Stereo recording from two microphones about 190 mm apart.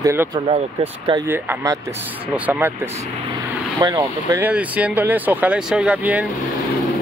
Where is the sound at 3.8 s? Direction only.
20° right (ahead or behind).